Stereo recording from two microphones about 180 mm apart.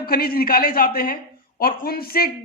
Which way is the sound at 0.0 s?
55° left (ahead or behind).